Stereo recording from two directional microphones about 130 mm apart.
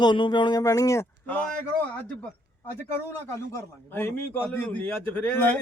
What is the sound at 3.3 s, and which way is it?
A man's voice, 20° left (ahead or behind).